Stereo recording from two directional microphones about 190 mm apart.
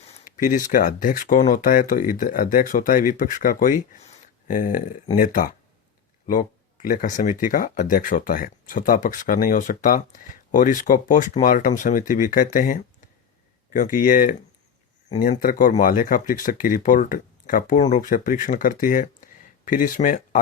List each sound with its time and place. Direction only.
0.0 s speech: 40° left (ahead or behind)
6.8 s speech: 45° left (ahead or behind)